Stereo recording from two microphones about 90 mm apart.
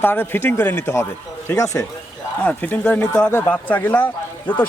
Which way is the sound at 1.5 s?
35° left (ahead or behind).